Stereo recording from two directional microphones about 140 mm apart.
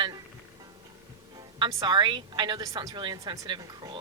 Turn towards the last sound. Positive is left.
turn(degrees=-30)  # may be behind; listen again after turning